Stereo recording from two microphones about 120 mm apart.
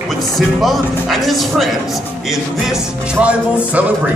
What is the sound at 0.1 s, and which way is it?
Speech, centre (ahead or behind).